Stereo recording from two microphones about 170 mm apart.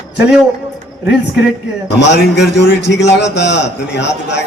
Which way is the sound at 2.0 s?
90° left.